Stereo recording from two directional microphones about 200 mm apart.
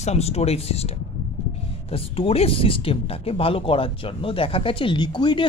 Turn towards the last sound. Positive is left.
turn(degrees=20)  # may be behind; listen again after turning